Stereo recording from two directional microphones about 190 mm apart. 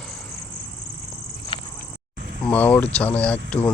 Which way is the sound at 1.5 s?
30° left (ahead or behind).